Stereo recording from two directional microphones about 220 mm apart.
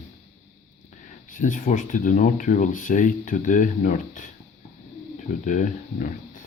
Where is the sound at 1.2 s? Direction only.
35° left (ahead or behind).